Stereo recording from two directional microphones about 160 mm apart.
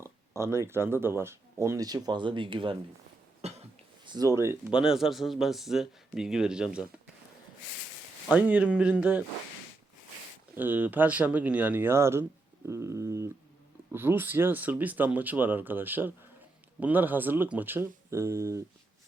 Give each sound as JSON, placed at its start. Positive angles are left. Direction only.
{"t": 0.0, "sound": "speech", "side_deg": -15}
{"t": 3.4, "sound": "cough", "side_deg": -40}
{"t": 4.0, "sound": "speech", "side_deg": -25}
{"t": 4.7, "sound": "speech", "side_deg": -5}
{"t": 8.3, "sound": "speech", "side_deg": -10}
{"t": 10.5, "sound": "speech", "side_deg": -10}